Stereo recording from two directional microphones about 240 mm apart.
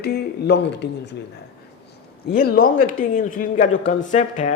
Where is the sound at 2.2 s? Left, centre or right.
Left.